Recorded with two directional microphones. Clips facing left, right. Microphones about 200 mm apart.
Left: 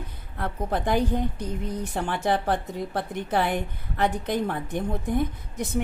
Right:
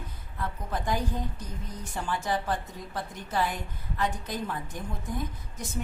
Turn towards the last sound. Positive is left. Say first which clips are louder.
# left 8 dB
turn(degrees=65)  # may be behind; listen again after turning